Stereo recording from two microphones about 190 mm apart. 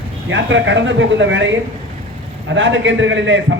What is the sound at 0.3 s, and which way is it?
A man's voice, 75° right (ahead or behind).